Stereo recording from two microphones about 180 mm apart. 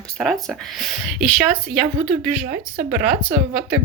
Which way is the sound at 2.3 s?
60° right (ahead or behind).